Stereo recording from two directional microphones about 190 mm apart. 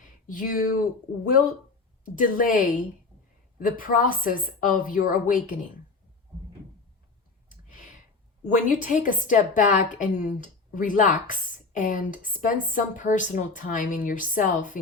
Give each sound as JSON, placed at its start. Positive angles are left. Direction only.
{"t": 0.3, "sound": "speech", "side_deg": 45}
{"t": 2.0, "sound": "speech", "side_deg": 45}
{"t": 8.4, "sound": "speech", "side_deg": 45}